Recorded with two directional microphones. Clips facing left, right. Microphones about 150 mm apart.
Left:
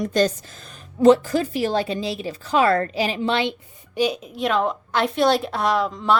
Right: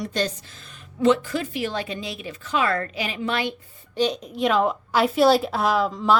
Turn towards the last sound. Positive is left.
turn(degrees=0)  # may be behind; listen again after turning